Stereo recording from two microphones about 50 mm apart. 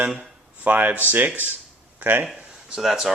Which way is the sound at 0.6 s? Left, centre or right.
Right.